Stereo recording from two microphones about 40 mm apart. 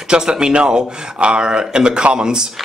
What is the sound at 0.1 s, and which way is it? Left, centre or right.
Speech, right.